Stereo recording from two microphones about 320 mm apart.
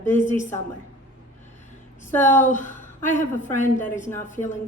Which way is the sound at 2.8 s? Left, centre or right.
Centre.